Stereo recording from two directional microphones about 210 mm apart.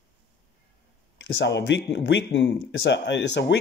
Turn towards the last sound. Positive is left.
turn(degrees=55)  # may be behind; listen again after turning